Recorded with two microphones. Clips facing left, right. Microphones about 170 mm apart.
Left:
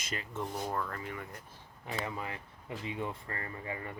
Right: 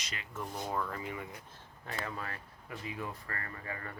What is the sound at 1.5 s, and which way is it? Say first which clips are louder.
Speech: left 7 dB; 15° left (ahead or behind).